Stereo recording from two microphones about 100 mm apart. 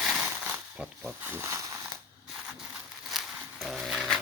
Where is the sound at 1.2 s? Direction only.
20° right (ahead or behind).